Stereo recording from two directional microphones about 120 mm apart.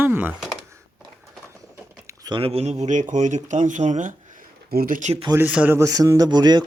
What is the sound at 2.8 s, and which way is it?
Speech, 90° right.